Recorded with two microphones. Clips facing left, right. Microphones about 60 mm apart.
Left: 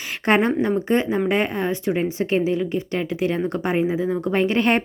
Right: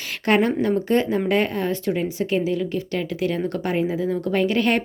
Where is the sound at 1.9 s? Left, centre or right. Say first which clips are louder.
Left 2 dB; left.